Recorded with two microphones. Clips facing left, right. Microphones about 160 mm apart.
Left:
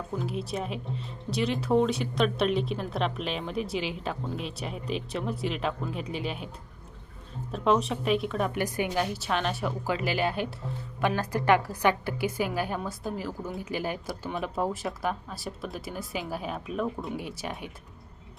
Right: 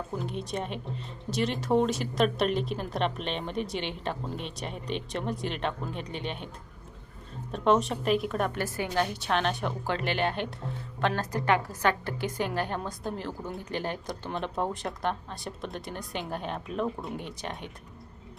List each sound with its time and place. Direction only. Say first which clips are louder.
0.2 s speech: left 2 dB; centre (ahead or behind)
7.5 s speech: right 1 dB; centre (ahead or behind)
8.5 s a woman's voice: left 1 dB; 15° left (ahead or behind)
9.1 s a woman's voice: right 1 dB; centre (ahead or behind)